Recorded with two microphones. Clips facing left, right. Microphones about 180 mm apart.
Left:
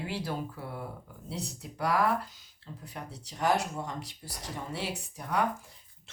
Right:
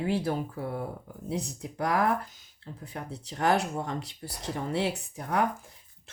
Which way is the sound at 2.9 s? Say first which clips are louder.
Right 4 dB; 60° right (ahead or behind).